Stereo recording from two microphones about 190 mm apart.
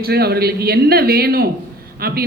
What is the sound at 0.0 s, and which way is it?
A man's voice, 55° right (ahead or behind).